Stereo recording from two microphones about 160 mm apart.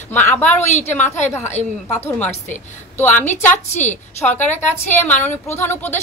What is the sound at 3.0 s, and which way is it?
Speech, 10° left (ahead or behind).